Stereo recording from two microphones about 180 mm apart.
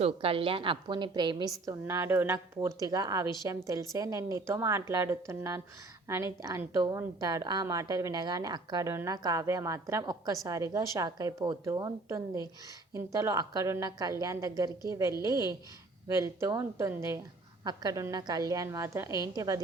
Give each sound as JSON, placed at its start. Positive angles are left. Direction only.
{"t": 0.0, "sound": "a woman's voice", "side_deg": -30}